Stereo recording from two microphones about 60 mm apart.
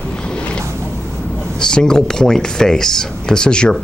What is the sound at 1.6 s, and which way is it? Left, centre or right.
Speech, centre.